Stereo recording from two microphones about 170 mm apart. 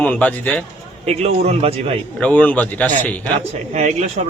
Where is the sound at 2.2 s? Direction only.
10° left (ahead or behind).